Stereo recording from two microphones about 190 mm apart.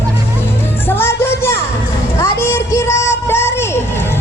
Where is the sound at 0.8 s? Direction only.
10° left (ahead or behind).